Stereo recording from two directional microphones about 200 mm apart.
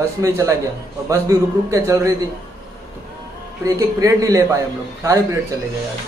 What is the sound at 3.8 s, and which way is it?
Speech, 15° right (ahead or behind).